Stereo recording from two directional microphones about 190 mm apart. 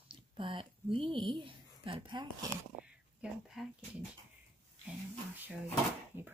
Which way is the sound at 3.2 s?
Centre (ahead or behind).